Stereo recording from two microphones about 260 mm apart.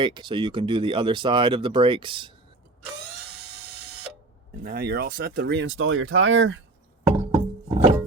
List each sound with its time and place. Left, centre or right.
0.0 s speech: centre
4.6 s speech: right
7.2 s music: centre